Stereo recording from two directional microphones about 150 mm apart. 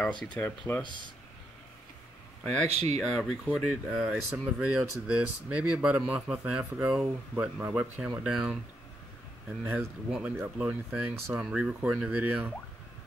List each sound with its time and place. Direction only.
0.0 s speech: 5° left (ahead or behind)
2.7 s speech: 45° right (ahead or behind)
3.0 s speech: centre (ahead or behind)
9.8 s speech: 5° right (ahead or behind)